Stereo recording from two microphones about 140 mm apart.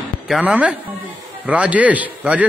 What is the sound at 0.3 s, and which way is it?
A man's voice, 5° right (ahead or behind).